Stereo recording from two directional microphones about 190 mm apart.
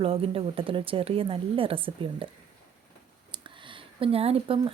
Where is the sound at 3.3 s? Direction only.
25° right (ahead or behind).